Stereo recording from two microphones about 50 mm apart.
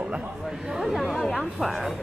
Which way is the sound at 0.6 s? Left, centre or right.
Centre.